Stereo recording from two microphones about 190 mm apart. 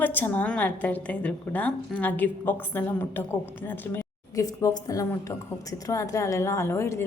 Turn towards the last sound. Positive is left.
turn(degrees=15)  # may be behind; listen again after turning